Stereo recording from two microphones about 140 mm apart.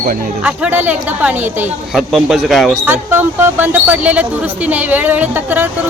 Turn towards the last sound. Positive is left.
turn(degrees=-10)  # may be behind; listen again after turning